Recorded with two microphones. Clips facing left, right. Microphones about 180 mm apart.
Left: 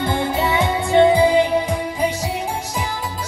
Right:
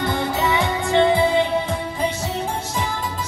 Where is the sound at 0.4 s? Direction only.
20° left (ahead or behind).